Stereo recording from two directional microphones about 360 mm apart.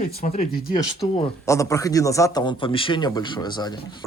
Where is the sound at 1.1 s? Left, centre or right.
Centre.